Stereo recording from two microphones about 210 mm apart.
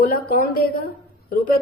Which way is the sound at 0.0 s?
45° left (ahead or behind).